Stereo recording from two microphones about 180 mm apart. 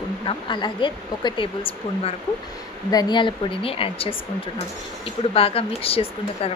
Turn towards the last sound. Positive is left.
turn(degrees=30)  # may be behind; listen again after turning